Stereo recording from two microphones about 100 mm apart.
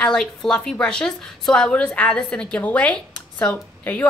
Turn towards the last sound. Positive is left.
turn(degrees=15)  # may be behind; listen again after turning